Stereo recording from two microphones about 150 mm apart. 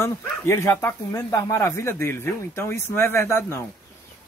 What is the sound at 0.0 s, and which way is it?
Speech, 15° left (ahead or behind).